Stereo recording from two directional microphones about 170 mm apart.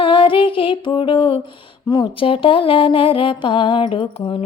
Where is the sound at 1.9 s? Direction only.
30° left (ahead or behind).